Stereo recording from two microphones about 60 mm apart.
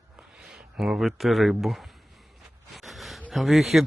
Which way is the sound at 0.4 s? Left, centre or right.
Centre.